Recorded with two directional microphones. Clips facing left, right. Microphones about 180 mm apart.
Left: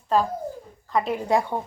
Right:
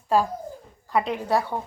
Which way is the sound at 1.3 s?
20° left (ahead or behind).